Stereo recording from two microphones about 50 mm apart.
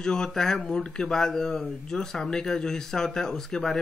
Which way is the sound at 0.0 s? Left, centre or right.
Centre.